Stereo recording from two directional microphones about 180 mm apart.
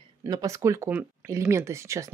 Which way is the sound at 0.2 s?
20° right (ahead or behind).